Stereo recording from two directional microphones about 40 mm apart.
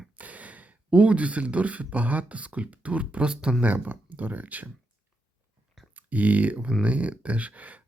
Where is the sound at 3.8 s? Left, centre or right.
Right.